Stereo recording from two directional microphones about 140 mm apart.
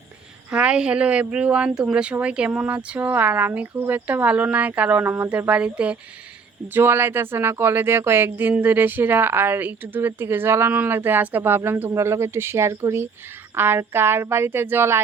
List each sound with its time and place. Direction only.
0.5 s speech: 5° right (ahead or behind)